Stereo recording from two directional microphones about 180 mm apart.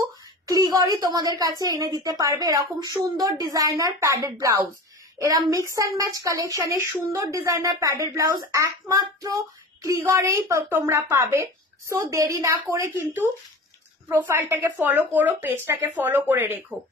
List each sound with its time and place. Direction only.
0.5 s a woman's voice: 20° right (ahead or behind)